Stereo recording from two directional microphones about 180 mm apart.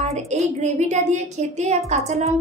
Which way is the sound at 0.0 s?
40° right (ahead or behind).